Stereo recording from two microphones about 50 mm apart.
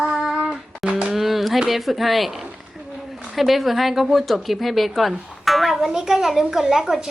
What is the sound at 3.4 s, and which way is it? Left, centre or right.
A woman's voice, centre.